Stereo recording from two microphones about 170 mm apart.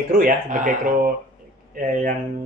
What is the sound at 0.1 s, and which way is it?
Speech, 55° right (ahead or behind).